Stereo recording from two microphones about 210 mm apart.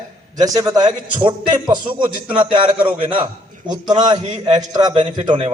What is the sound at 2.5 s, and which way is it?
A man's voice, 25° right (ahead or behind).